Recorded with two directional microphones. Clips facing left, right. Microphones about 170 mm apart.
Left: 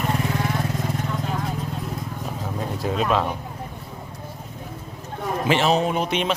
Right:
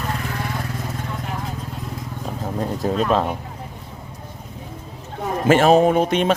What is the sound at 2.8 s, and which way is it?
Speech, 40° right (ahead or behind).